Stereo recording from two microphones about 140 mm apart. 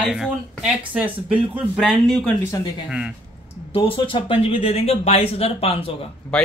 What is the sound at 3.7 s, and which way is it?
Speech, 40° left (ahead or behind).